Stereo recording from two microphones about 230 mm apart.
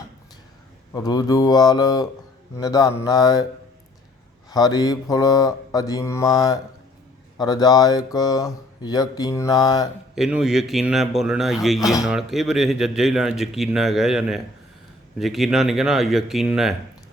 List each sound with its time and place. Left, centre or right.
0.9 s speech: centre
4.4 s speech: centre
10.2 s speech: centre